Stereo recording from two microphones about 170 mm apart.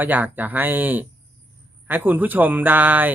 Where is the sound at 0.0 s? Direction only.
10° right (ahead or behind).